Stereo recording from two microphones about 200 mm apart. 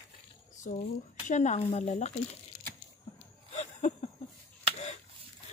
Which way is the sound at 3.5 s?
35° left (ahead or behind).